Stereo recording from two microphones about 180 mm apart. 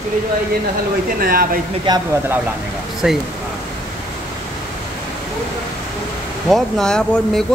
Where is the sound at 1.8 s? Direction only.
20° right (ahead or behind).